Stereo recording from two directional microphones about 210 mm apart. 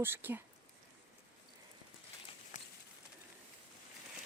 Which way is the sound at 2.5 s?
35° left (ahead or behind).